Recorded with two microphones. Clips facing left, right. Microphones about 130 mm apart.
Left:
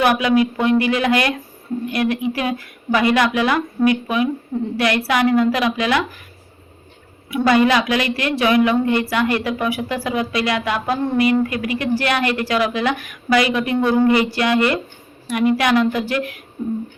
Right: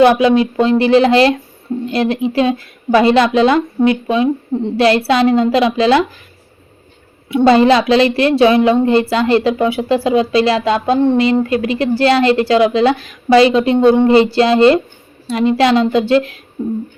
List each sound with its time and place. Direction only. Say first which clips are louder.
0.0 s a woman's voice: right 6 dB; 25° right (ahead or behind)
7.3 s a woman's voice: right 6 dB; 25° right (ahead or behind)